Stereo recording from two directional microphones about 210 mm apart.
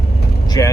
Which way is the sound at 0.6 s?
15° left (ahead or behind).